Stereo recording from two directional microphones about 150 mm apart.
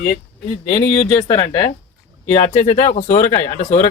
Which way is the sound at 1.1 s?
35° left (ahead or behind).